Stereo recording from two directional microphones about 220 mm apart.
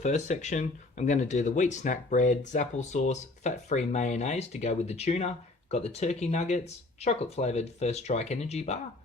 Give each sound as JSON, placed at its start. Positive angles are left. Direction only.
{"t": 0.0, "sound": "speech", "side_deg": 30}